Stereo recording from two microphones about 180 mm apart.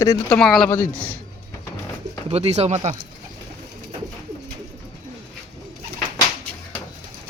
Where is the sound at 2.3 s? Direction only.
35° right (ahead or behind).